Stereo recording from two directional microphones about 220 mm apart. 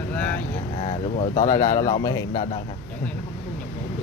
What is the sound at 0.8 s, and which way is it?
Speech, 30° left (ahead or behind).